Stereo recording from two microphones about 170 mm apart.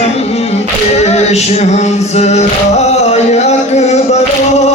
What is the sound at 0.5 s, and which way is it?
A capella, 40° left (ahead or behind).